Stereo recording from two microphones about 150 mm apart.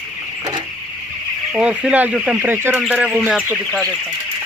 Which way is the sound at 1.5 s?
5° right (ahead or behind).